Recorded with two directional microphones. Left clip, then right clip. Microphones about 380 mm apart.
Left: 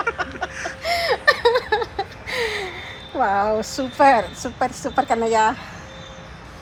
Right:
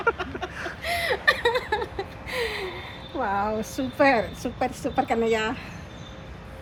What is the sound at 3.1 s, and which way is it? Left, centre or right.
Speech, left.